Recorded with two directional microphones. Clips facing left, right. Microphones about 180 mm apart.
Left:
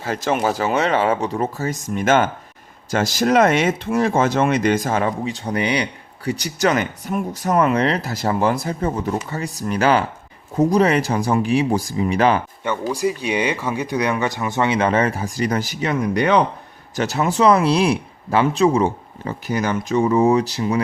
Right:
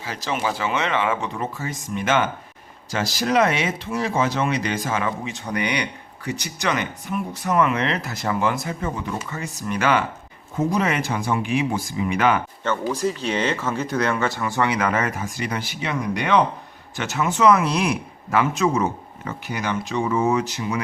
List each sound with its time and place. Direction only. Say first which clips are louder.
0.0 s speech: left 6 dB; 50° left (ahead or behind); by 12.4 s 35° left (ahead or behind)
12.6 s speech: left 2 dB; 15° left (ahead or behind); by 20.8 s 35° left (ahead or behind)